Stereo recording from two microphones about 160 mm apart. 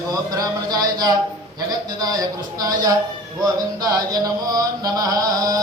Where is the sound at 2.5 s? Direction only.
25° right (ahead or behind).